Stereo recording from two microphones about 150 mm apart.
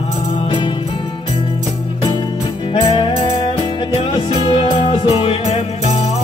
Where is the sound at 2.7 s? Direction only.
35° left (ahead or behind).